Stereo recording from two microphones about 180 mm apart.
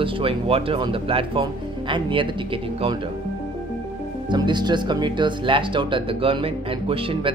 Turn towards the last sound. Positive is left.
turn(degrees=-30)  # may be behind; listen again after turning